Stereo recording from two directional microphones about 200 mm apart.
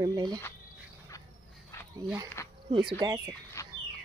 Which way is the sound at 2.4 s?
15° left (ahead or behind).